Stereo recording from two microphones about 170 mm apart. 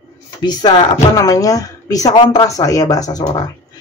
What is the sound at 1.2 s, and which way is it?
A woman's voice, 20° left (ahead or behind).